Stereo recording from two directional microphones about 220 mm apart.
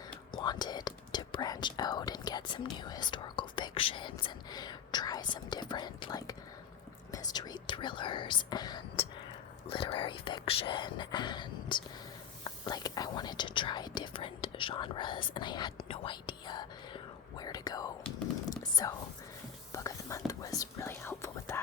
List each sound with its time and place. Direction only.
0.3 s whispering: 20° left (ahead or behind)
7.1 s speech: 15° left (ahead or behind)
19.7 s whispering: 15° left (ahead or behind)